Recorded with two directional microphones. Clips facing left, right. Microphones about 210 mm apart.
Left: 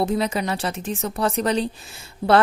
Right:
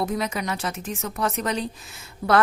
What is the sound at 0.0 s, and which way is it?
A woman's voice, 30° left (ahead or behind).